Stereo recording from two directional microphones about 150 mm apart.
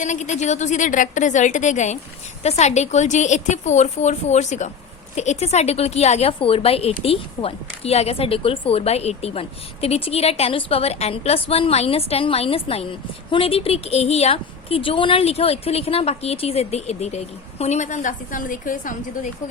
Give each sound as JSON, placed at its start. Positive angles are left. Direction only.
{"t": 0.0, "sound": "a woman's voice", "side_deg": 55}